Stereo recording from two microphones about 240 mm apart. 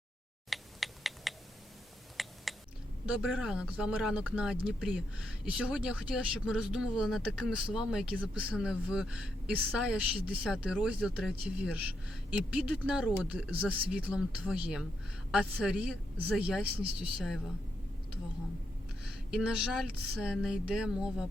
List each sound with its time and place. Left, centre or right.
0.5 s a sound: centre
3.2 s speech: centre
19.0 s speech: centre